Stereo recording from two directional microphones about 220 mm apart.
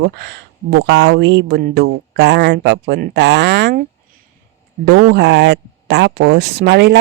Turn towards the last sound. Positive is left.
turn(degrees=-50)  # may be behind; listen again after turning